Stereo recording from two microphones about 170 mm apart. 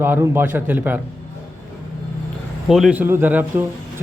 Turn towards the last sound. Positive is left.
turn(degrees=-10)  # may be behind; listen again after turning